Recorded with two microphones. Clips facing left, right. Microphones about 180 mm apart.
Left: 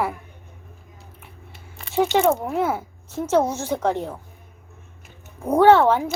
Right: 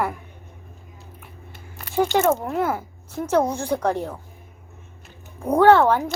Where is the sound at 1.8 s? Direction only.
Centre (ahead or behind).